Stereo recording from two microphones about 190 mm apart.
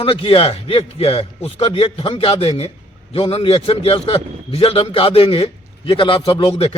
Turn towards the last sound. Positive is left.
turn(degrees=30)  # may be behind; listen again after turning